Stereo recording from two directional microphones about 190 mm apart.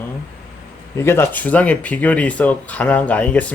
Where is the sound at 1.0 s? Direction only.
10° left (ahead or behind).